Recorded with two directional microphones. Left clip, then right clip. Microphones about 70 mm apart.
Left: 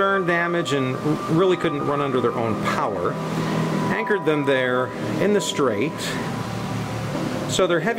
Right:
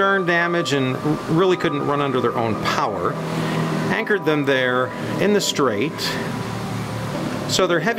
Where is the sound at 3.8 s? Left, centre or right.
Right.